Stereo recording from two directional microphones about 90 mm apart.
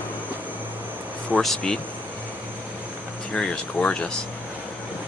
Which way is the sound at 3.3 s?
10° left (ahead or behind).